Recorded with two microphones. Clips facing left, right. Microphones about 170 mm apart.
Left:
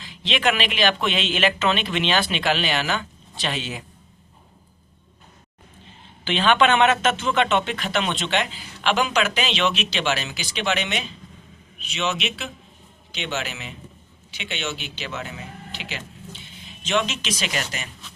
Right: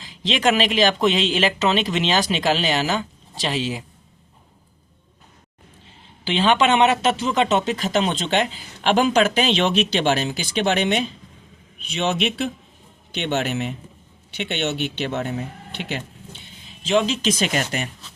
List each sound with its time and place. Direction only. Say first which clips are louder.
0.3 s speech: right 4 dB; 40° right (ahead or behind)
6.2 s speech: right 1 dB; 30° right (ahead or behind); by 15.1 s 60° right (ahead or behind)
15.1 s speech: right 7 dB; 40° right (ahead or behind)
16.8 s speech: right 4 dB; 30° right (ahead or behind)
17.3 s speech: right 6 dB; 45° right (ahead or behind)